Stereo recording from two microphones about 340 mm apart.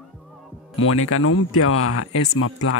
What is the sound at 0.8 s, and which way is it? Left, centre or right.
Speech, left.